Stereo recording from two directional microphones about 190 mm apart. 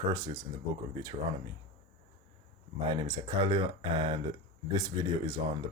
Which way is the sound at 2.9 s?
25° right (ahead or behind).